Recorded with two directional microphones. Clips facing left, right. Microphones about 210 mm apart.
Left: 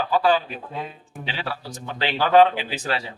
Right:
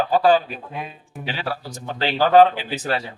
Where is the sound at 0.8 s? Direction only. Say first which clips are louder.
Left 1 dB; 15° right (ahead or behind).